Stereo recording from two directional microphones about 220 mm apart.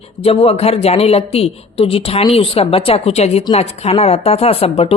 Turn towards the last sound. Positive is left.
turn(degrees=25)  # may be behind; listen again after turning